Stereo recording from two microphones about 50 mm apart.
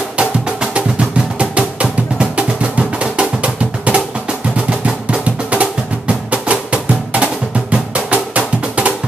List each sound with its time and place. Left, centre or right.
0.2 s music: right